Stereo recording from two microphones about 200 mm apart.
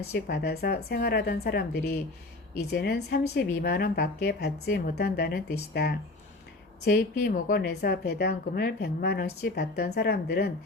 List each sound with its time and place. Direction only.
0.1 s a woman's voice: 55° left (ahead or behind)